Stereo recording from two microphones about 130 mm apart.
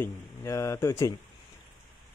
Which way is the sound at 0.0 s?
20° left (ahead or behind).